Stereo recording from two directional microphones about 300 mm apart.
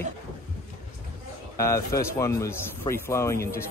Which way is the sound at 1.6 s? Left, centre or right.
Centre.